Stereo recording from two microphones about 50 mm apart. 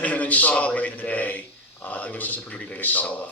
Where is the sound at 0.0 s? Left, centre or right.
Left.